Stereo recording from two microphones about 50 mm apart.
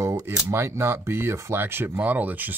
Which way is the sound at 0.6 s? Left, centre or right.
Right.